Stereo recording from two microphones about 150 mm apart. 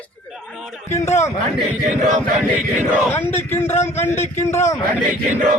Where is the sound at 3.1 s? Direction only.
15° left (ahead or behind).